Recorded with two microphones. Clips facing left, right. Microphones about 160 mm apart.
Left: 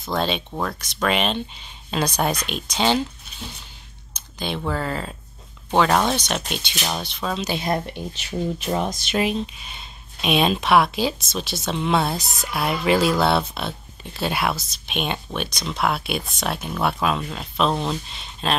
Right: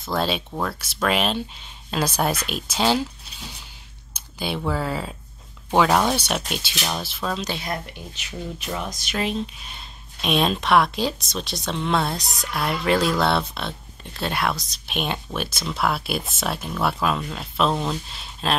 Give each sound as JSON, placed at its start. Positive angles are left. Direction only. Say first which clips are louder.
{"t": 0.0, "sound": "speech", "louder": "even", "side_deg": -5}
{"t": 4.1, "sound": "speech", "louder": "even", "side_deg": -10}
{"t": 7.6, "sound": "speech", "louder": "left 6 dB", "side_deg": 30}
{"t": 9.2, "sound": "speech", "louder": "left 1 dB", "side_deg": 5}